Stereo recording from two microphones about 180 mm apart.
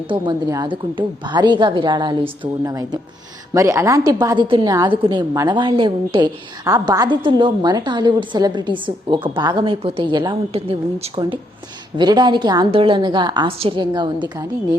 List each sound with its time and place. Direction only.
0.1 s a woman's voice: 20° right (ahead or behind)